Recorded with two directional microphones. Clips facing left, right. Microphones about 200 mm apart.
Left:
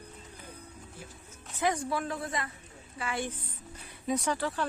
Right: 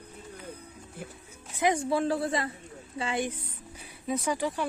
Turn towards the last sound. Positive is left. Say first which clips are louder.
# right 2 dB
turn(degrees=-15)  # may be behind; listen again after turning